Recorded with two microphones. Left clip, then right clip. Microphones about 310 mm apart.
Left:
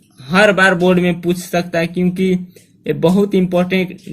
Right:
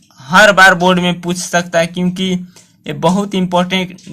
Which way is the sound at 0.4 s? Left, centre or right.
Right.